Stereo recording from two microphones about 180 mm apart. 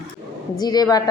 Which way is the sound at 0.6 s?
20° left (ahead or behind).